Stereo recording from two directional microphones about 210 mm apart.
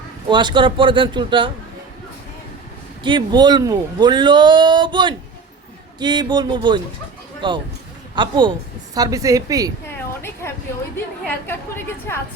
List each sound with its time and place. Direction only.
0.3 s a man's voice: 20° right (ahead or behind)
3.0 s a man's voice: 20° right (ahead or behind)
10.4 s a woman's voice: 10° left (ahead or behind)